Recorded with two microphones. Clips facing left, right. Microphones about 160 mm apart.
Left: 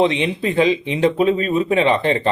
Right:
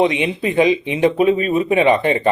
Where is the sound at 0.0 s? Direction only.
15° right (ahead or behind).